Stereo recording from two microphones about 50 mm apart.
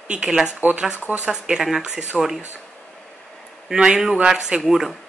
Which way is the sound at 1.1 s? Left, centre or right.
Centre.